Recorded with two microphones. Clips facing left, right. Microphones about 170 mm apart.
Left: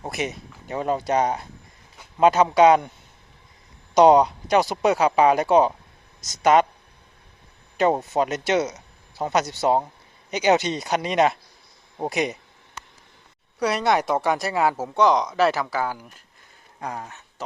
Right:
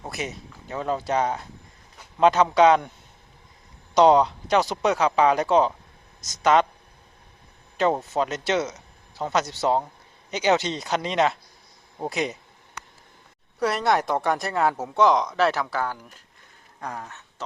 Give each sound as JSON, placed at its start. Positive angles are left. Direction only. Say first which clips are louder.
{"t": 0.0, "sound": "speech", "louder": "left 4 dB", "side_deg": 15}
{"t": 3.9, "sound": "speech", "louder": "left 2 dB", "side_deg": 15}
{"t": 7.8, "sound": "speech", "louder": "left 2 dB", "side_deg": 10}
{"t": 13.6, "sound": "speech", "louder": "left 1 dB", "side_deg": 0}
{"t": 16.8, "sound": "speech", "louder": "left 2 dB", "side_deg": 15}